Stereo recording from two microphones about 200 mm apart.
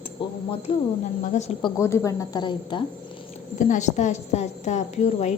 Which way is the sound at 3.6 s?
35° left (ahead or behind).